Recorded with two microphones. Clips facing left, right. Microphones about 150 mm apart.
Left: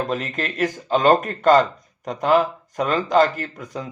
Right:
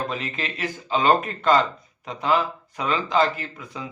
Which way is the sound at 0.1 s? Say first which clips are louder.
Left 5 dB; 45° left (ahead or behind).